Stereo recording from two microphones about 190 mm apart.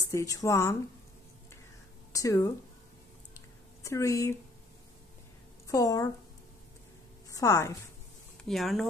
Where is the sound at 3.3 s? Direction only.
15° left (ahead or behind).